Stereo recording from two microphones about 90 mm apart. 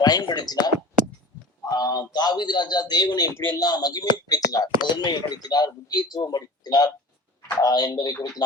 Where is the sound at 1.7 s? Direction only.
50° left (ahead or behind).